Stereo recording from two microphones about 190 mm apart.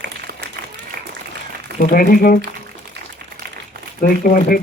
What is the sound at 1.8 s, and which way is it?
Speech, 50° left (ahead or behind).